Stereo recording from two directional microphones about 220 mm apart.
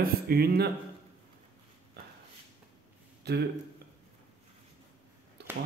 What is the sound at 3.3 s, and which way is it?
Speech, 50° right (ahead or behind).